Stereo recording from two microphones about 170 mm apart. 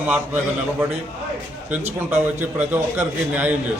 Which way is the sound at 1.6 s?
10° right (ahead or behind).